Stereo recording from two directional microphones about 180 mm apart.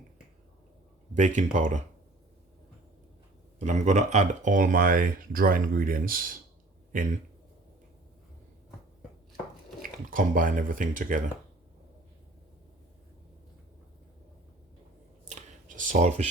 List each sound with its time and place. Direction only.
1.1 s speech: 45° right (ahead or behind)
3.6 s speech: 40° right (ahead or behind)
9.8 s speech: 50° right (ahead or behind)
15.2 s a sound: 40° right (ahead or behind)